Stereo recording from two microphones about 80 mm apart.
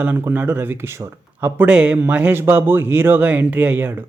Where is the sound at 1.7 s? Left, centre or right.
Centre.